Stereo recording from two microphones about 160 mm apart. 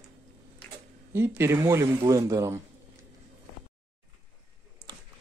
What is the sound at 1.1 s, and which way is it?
Speech, 15° right (ahead or behind).